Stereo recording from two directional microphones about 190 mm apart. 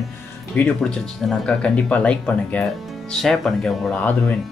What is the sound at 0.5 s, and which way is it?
Speech, 5° left (ahead or behind).